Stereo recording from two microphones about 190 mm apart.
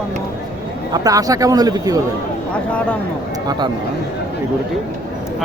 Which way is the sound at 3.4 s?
25° right (ahead or behind).